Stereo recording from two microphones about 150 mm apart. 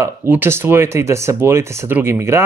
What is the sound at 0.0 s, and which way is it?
Speech, 15° right (ahead or behind).